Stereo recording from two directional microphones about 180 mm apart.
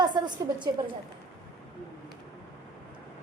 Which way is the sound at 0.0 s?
25° right (ahead or behind).